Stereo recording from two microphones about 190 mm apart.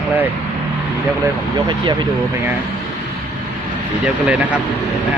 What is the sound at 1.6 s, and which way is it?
Speech, 25° right (ahead or behind).